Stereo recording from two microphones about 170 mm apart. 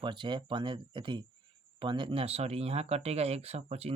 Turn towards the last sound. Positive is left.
turn(degrees=-40)  # may be behind; listen again after turning